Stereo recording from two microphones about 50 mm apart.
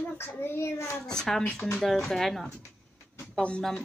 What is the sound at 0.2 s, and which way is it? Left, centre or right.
Speech, left.